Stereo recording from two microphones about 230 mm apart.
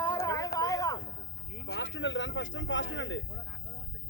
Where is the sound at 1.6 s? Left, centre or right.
Left.